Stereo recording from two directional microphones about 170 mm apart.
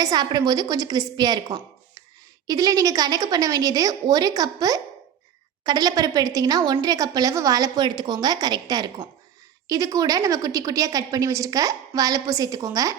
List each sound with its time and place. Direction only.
0.0 s a woman's voice: 25° right (ahead or behind)